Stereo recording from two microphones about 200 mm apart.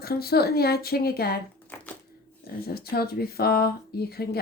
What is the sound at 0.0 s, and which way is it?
Speech, 50° left (ahead or behind).